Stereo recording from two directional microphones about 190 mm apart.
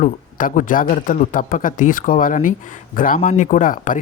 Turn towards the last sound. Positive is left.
turn(degrees=45)  # may be behind; listen again after turning